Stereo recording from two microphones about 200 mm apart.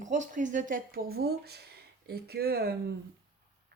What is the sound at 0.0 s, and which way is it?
Speech, 35° right (ahead or behind).